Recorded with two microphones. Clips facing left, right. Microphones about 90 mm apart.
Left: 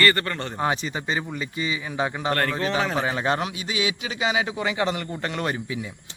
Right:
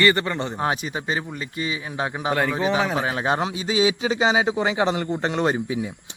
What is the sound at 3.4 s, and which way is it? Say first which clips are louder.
A man's voice: right 6 dB; 25° right (ahead or behind).